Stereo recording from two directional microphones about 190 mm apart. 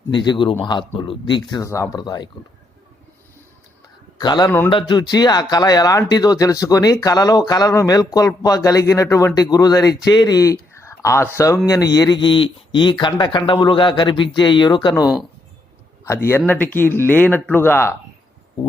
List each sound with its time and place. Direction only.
0.1 s speech: 25° left (ahead or behind)
4.2 s speech: 20° left (ahead or behind)
15.0 s speech: 5° right (ahead or behind)
16.0 s speech: 15° left (ahead or behind)